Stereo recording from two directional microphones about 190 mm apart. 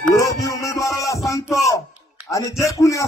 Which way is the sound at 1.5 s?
15° left (ahead or behind).